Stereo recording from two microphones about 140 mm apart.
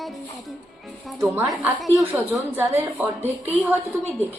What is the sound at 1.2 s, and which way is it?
Speech, 20° right (ahead or behind).